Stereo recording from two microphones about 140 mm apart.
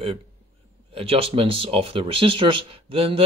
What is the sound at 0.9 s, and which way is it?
Speech, 45° right (ahead or behind).